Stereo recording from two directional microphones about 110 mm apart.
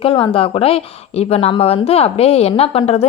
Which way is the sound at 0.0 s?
55° left (ahead or behind).